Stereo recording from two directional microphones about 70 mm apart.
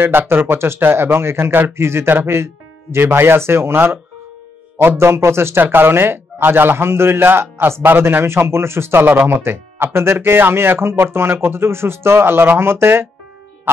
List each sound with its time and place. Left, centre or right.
0.3 s speech: right